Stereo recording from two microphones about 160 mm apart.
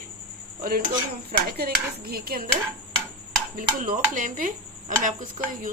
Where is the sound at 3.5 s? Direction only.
60° right (ahead or behind).